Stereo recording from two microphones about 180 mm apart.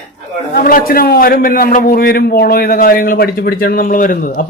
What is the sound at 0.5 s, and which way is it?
A man's voice, 50° left (ahead or behind).